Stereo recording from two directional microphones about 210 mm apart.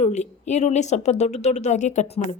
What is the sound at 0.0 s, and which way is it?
A woman's voice, 35° left (ahead or behind).